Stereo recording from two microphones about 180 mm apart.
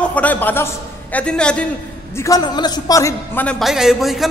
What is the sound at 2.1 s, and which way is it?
A man's voice, 20° left (ahead or behind).